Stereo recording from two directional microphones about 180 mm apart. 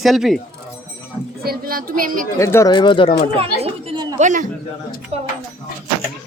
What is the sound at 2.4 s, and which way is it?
Speech, 15° left (ahead or behind).